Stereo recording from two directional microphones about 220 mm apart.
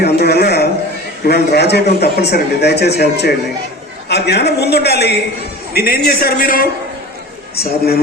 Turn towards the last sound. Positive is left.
turn(degrees=45)  # may be behind; listen again after turning